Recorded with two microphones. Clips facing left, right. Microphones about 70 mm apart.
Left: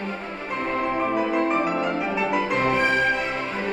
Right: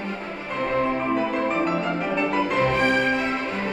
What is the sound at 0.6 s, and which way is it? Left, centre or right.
Music, centre.